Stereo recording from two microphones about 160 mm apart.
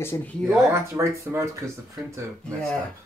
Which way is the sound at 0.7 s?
20° right (ahead or behind).